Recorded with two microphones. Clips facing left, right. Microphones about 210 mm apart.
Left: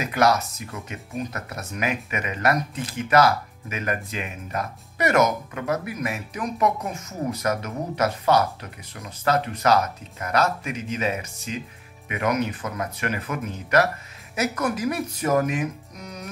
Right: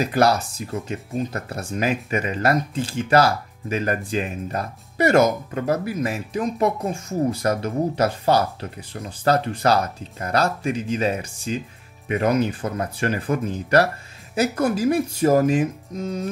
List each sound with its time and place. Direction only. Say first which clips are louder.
0.0 s speech: right 2 dB; 35° right (ahead or behind)